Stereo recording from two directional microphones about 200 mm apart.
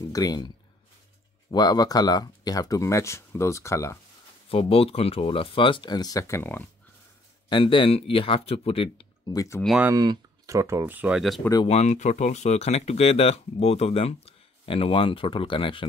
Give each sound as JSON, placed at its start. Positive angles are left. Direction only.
{"t": 0.1, "sound": "speech", "side_deg": 20}
{"t": 1.5, "sound": "speech", "side_deg": 20}
{"t": 4.5, "sound": "speech", "side_deg": 30}
{"t": 7.4, "sound": "speech", "side_deg": 25}
{"t": 9.6, "sound": "speech", "side_deg": -5}
{"t": 9.9, "sound": "speech", "side_deg": -20}
{"t": 11.6, "sound": "speech", "side_deg": 35}